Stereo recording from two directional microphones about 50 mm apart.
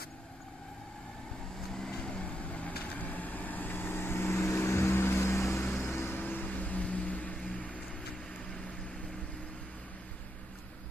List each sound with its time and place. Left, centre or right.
1.7 s vehicle: centre; by 4.4 s left
4.5 s music: left
5.8 s vehicle: left
6.1 s vehicle: left
7.4 s a sound: left